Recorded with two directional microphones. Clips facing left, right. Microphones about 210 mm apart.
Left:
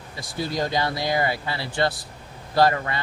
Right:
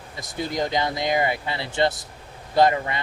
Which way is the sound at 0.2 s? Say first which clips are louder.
Even; 20° right (ahead or behind).